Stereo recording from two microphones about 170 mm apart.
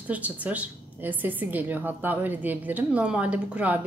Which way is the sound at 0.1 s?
10° right (ahead or behind).